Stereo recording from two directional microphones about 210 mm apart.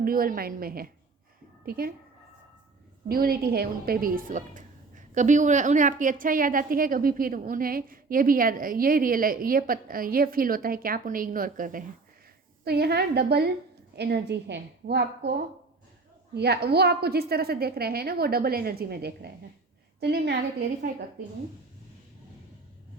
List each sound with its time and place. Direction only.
0.0 s a woman's voice: 45° right (ahead or behind)
3.1 s a woman's voice: 45° right (ahead or behind)